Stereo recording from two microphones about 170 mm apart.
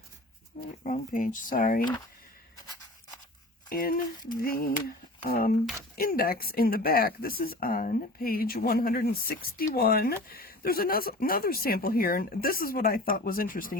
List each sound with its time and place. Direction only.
0.9 s speech: 50° left (ahead or behind)
3.7 s speech: 55° left (ahead or behind)
6.0 s speech: 60° left (ahead or behind)